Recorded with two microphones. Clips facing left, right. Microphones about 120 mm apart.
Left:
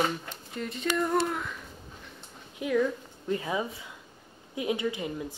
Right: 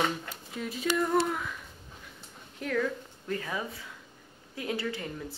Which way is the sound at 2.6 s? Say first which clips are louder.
Left 4 dB; 10° left (ahead or behind).